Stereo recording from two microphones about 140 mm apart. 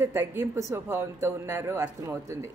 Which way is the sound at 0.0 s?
15° right (ahead or behind).